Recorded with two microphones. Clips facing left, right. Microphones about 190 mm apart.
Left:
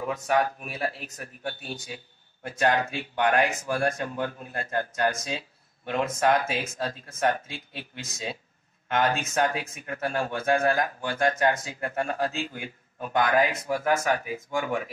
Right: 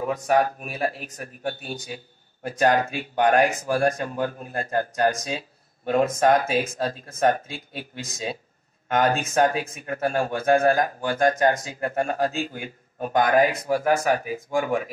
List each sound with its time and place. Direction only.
0.0 s speech: 40° right (ahead or behind)
8.8 s speech: 45° right (ahead or behind)